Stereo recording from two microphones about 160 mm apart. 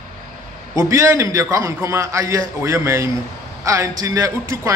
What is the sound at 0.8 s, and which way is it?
A man's voice, 20° right (ahead or behind).